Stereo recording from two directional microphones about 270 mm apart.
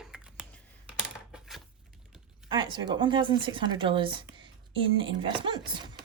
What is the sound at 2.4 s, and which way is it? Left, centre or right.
Speech, centre.